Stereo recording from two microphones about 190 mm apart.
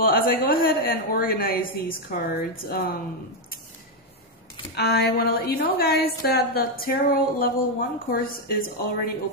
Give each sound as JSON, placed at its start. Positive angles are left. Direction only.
{"t": 0.0, "sound": "a woman's voice", "side_deg": 50}
{"t": 4.7, "sound": "a woman's voice", "side_deg": 55}